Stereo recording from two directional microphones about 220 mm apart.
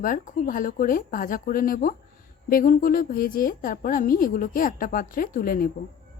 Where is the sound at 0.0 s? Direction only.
40° left (ahead or behind).